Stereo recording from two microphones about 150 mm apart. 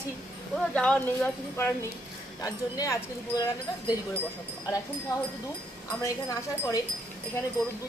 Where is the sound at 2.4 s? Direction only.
25° left (ahead or behind).